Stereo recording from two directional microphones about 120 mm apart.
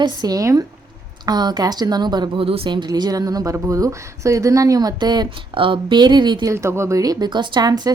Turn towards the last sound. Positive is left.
turn(degrees=-35)  # may be behind; listen again after turning